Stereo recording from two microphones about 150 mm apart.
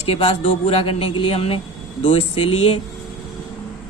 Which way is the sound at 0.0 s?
40° left (ahead or behind).